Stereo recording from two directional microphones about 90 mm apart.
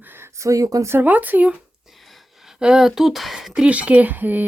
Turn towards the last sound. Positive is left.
turn(degrees=-20)  # may be behind; listen again after turning